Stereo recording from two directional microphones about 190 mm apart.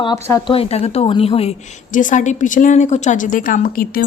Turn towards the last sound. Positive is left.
turn(degrees=50)  # may be behind; listen again after turning